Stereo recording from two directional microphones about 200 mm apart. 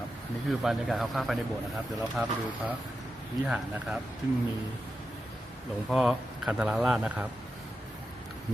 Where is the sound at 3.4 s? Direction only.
5° right (ahead or behind).